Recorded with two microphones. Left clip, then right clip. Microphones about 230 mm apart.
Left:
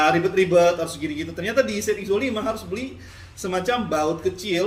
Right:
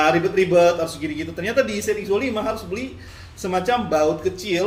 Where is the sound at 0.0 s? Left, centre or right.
Centre.